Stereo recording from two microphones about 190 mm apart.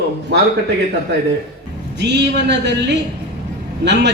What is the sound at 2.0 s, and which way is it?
Speech, 65° right (ahead or behind).